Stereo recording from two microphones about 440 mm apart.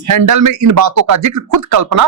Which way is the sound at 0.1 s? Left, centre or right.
Right.